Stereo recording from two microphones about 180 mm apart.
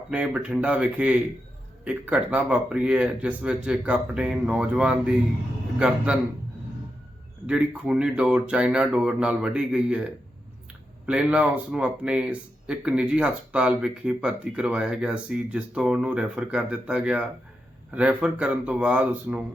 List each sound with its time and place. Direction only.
0.1 s speech: 5° right (ahead or behind)
7.4 s speech: 5° right (ahead or behind)
11.0 s speech: 5° right (ahead or behind)